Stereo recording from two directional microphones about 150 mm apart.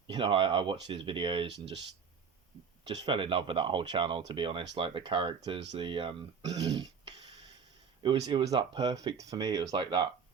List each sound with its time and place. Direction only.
0.1 s speech: 35° right (ahead or behind)
3.0 s speech: 35° right (ahead or behind)